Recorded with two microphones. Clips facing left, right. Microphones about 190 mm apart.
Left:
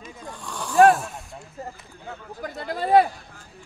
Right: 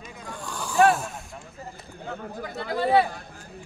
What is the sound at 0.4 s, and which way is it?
Snoring, centre (ahead or behind).